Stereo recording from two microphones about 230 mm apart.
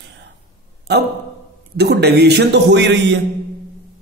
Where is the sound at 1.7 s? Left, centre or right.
Right.